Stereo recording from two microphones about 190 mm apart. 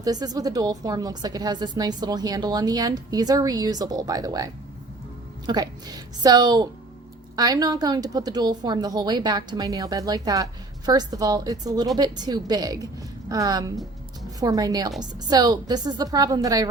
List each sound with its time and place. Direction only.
0.0 s a woman's voice: 20° right (ahead or behind)
5.5 s a woman's voice: 20° right (ahead or behind)